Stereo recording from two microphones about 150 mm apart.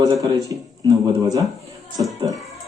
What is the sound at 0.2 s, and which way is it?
Speech, 25° right (ahead or behind).